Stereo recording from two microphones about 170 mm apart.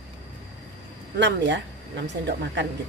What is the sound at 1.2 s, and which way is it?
A woman's voice, 90° right.